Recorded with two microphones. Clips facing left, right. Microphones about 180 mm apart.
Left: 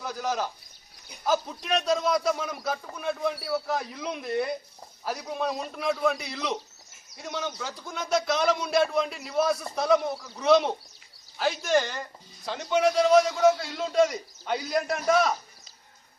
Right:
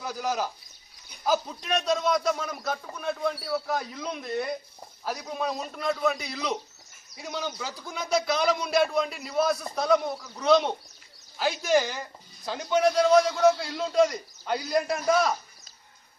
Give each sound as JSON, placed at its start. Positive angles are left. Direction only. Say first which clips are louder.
{"t": 0.0, "sound": "a man's voice", "louder": "even", "side_deg": 0}